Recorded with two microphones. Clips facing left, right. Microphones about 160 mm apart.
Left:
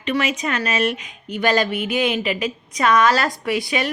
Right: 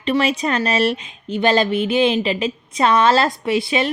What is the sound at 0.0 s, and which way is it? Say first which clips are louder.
A woman's voice: right 4 dB; 30° right (ahead or behind).